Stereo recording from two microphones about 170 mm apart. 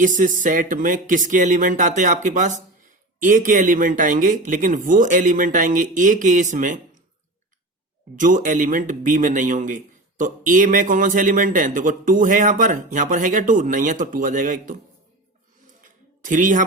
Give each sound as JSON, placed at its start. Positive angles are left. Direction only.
{"t": 0.0, "sound": "a man's voice", "side_deg": -50}
{"t": 8.2, "sound": "a man's voice", "side_deg": -50}
{"t": 15.8, "sound": "a sound", "side_deg": -50}